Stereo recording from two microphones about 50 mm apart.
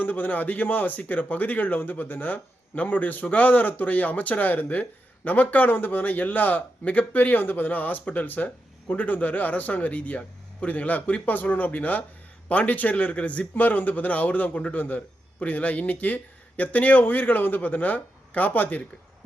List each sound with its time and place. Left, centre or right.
0.0 s speech: left